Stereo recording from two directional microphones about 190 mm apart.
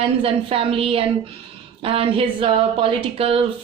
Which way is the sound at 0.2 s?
30° right (ahead or behind).